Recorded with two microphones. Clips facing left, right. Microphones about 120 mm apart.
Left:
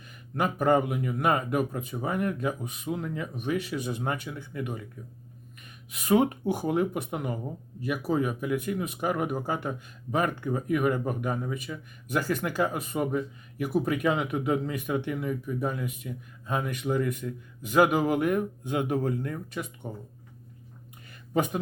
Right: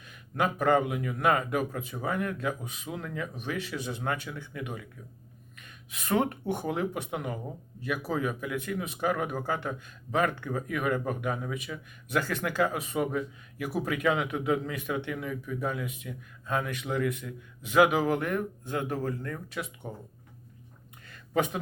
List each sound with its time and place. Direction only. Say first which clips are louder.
0.3 s speech: left 1 dB; 5° left (ahead or behind)
5.6 s a sound: left 6 dB; 5° left (ahead or behind)
6.1 s speech: left 3 dB; 15° left (ahead or behind)
18.2 s speech: left 5 dB; 15° left (ahead or behind)
19.5 s speech: left 1 dB; centre (ahead or behind)
21.3 s speech: left 1 dB; centre (ahead or behind)